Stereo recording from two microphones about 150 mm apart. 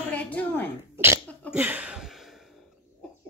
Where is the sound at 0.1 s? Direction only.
10° left (ahead or behind).